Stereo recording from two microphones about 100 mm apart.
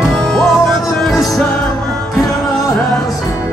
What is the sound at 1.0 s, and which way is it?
Music, centre (ahead or behind).